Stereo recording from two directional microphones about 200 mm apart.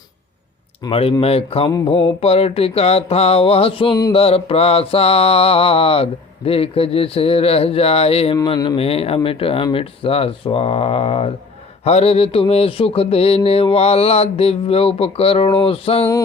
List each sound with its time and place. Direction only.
0.9 s mantra: 30° left (ahead or behind)